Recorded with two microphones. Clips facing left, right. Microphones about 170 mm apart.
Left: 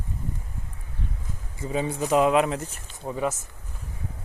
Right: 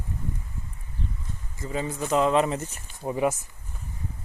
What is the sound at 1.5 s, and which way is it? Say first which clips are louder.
Speech: left 3 dB; 15° left (ahead or behind).